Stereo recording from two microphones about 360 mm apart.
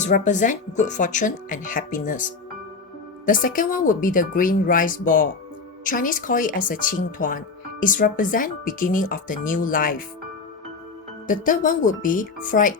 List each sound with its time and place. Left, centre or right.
0.0 s speech: left
3.2 s speech: left
11.3 s speech: left